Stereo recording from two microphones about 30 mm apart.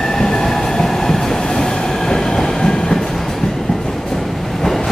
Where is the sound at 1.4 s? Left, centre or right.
Left.